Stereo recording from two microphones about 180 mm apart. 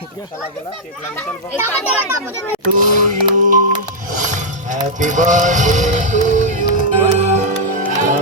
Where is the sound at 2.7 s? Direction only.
45° right (ahead or behind).